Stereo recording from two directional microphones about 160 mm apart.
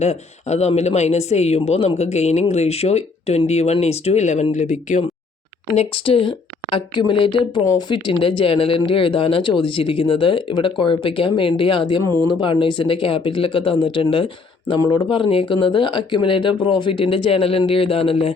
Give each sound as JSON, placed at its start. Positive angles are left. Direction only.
{"t": 0.0, "sound": "speech", "side_deg": 45}
{"t": 5.7, "sound": "speech", "side_deg": 35}